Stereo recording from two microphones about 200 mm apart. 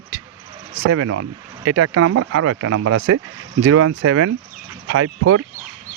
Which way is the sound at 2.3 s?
90° right.